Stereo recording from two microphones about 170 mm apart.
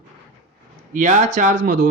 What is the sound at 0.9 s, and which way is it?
Speech, 50° right (ahead or behind).